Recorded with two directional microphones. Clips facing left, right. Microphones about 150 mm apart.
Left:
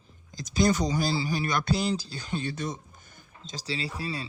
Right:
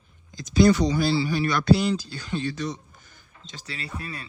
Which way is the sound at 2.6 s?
50° left (ahead or behind).